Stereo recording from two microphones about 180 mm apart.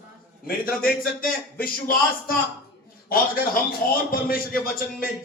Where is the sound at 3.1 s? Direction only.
55° left (ahead or behind).